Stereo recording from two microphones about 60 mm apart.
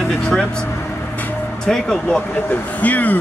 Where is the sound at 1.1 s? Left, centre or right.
Left.